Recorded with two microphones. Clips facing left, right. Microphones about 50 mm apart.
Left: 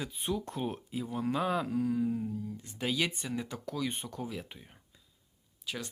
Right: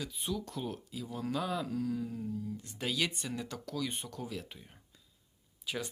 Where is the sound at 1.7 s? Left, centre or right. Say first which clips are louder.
Left 5 dB; left.